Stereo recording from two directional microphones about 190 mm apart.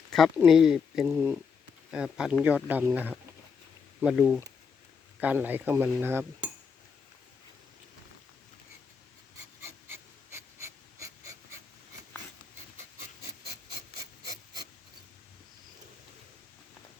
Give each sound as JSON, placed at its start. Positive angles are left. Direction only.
{"t": 0.3, "sound": "speech", "side_deg": -5}
{"t": 1.0, "sound": "cutlery", "side_deg": -15}
{"t": 1.9, "sound": "cutlery", "side_deg": -5}
{"t": 4.0, "sound": "speech", "side_deg": -5}
{"t": 5.2, "sound": "cutlery", "side_deg": -10}
{"t": 9.6, "sound": "a sound", "side_deg": -15}
{"t": 14.3, "sound": "a sound", "side_deg": -20}